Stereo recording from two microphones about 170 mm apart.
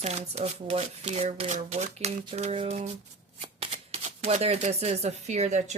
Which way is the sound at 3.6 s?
40° right (ahead or behind).